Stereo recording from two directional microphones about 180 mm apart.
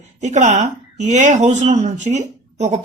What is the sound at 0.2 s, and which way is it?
A woman's voice, 40° right (ahead or behind).